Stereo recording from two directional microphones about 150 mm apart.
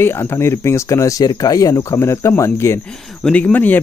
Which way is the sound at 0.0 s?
15° left (ahead or behind).